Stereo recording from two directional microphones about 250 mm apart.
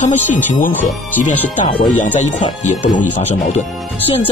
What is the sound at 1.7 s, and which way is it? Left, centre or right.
Speech, left.